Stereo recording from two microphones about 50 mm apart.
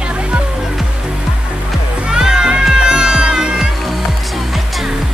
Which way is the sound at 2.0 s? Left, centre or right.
Centre.